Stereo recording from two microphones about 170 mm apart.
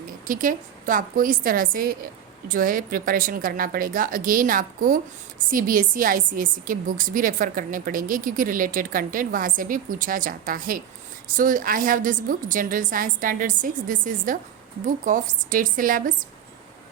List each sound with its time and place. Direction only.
0.3 s a woman's voice: 50° right (ahead or behind)